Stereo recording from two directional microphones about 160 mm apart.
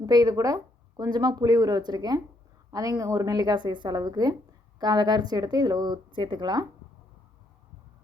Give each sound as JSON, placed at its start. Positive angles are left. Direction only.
{"t": 0.0, "sound": "speech", "side_deg": -25}